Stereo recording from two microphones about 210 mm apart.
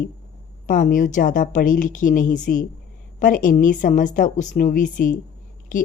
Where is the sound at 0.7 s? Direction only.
40° left (ahead or behind).